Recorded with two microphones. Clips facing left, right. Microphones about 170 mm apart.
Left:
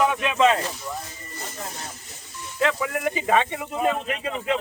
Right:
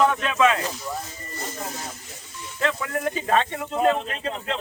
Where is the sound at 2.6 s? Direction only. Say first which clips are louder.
Left 2 dB; 10° left (ahead or behind).